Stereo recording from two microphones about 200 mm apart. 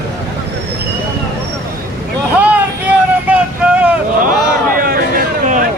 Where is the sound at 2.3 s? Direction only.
5° right (ahead or behind).